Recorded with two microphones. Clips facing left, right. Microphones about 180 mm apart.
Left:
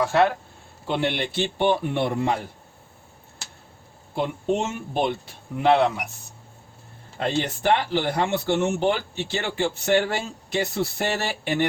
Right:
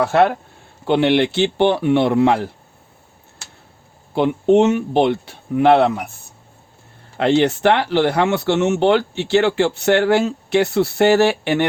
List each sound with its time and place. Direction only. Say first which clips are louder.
0.0 s speech: right 5 dB; 60° right (ahead or behind)
0.9 s speech: right 10 dB; 75° right (ahead or behind)
4.1 s speech: right 10 dB; 70° right (ahead or behind)
7.2 s speech: right 10 dB; 75° right (ahead or behind)